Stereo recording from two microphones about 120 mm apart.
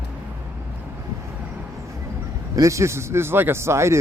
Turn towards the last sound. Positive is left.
turn(degrees=-25)  # may be behind; listen again after turning